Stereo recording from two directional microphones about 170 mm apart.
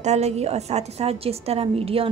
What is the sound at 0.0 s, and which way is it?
A woman's voice, 40° right (ahead or behind).